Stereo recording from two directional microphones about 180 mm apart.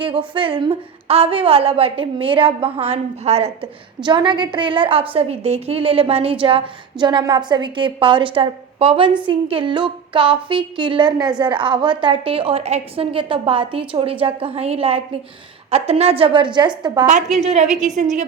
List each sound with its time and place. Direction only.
0.0 s a woman's voice: 30° right (ahead or behind)
17.4 s a woman's voice: 40° right (ahead or behind)